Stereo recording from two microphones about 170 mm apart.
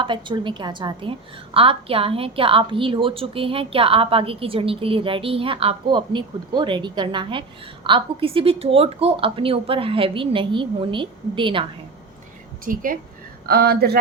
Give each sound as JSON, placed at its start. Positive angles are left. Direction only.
{"t": 0.0, "sound": "a woman's voice", "side_deg": -30}
{"t": 12.6, "sound": "a woman's voice", "side_deg": -55}
{"t": 13.5, "sound": "a woman's voice", "side_deg": -65}